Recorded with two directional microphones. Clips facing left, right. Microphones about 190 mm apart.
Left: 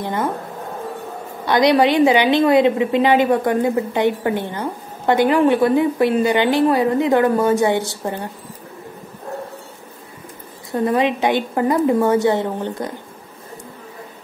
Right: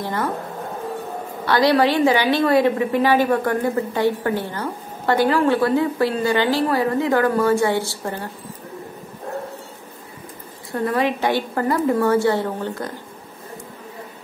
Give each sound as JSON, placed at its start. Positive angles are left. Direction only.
{"t": 0.0, "sound": "speech", "side_deg": 20}
{"t": 1.4, "sound": "a woman's voice", "side_deg": 20}
{"t": 10.7, "sound": "a woman's voice", "side_deg": 20}